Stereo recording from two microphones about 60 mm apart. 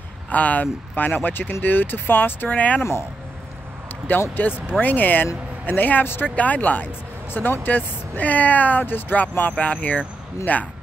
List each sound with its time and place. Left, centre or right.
0.3 s speech: left
2.8 s speech: left
4.4 s speech: left